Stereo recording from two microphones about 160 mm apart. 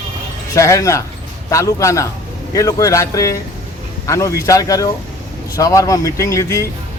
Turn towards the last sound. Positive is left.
turn(degrees=20)  # may be behind; listen again after turning